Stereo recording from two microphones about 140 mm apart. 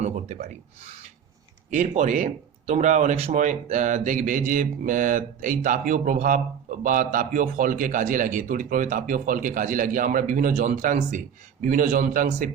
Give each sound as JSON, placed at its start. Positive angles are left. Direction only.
{"t": 0.0, "sound": "speech", "side_deg": -65}